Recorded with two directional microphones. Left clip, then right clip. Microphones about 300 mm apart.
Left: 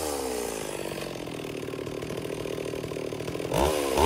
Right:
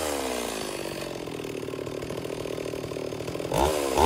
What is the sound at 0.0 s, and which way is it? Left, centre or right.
Chainsaw, centre.